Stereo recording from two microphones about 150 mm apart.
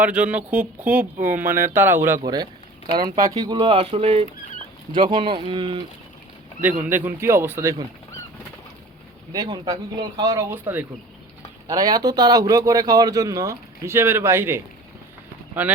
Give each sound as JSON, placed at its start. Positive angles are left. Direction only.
{"t": 0.0, "sound": "speech", "side_deg": -10}
{"t": 2.2, "sound": "speech", "side_deg": -25}
{"t": 6.6, "sound": "speech", "side_deg": -10}
{"t": 9.3, "sound": "speech", "side_deg": -25}
{"t": 11.7, "sound": "speech", "side_deg": -25}